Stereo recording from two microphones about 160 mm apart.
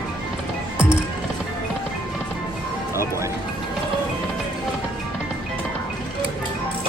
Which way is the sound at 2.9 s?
15° right (ahead or behind).